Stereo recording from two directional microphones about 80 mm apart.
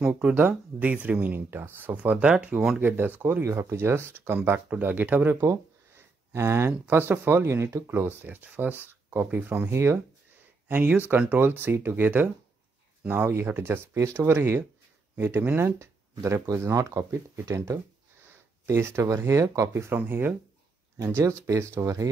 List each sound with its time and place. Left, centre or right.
0.3 s speech: right
10.7 s speech: right
21.0 s speech: right